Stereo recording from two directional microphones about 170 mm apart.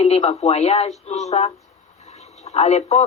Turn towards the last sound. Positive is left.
turn(degrees=40)  # may be behind; listen again after turning